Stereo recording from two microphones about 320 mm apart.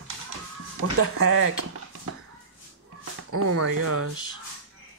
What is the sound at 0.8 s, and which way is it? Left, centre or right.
Speech, right.